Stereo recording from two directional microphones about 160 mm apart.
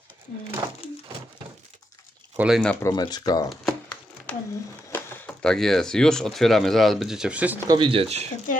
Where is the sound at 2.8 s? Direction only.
25° left (ahead or behind).